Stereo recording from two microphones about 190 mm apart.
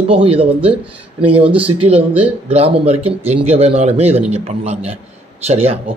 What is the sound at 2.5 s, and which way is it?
Speech, 30° right (ahead or behind).